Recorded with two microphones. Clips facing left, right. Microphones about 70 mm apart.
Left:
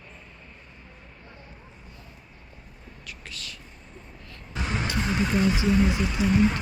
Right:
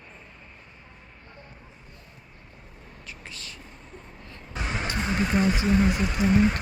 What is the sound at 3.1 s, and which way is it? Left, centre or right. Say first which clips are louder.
Speech: left 1 dB; right.